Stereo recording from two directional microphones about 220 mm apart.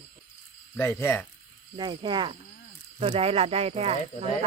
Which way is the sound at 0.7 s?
10° left (ahead or behind).